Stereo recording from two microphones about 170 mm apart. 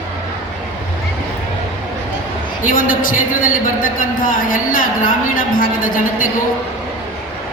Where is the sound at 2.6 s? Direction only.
55° left (ahead or behind).